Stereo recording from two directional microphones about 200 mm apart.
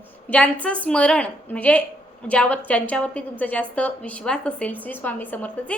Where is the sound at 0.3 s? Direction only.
5° left (ahead or behind).